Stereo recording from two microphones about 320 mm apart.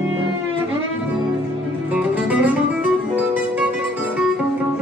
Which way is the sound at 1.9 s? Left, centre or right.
Centre.